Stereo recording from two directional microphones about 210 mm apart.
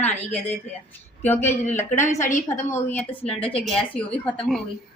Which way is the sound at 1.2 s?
10° left (ahead or behind).